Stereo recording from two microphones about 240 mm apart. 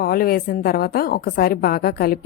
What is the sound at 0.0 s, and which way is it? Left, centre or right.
A woman's voice, left.